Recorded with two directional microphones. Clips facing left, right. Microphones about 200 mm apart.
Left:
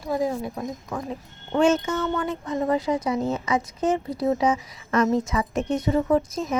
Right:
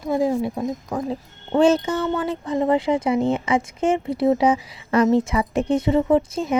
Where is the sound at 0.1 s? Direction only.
25° right (ahead or behind).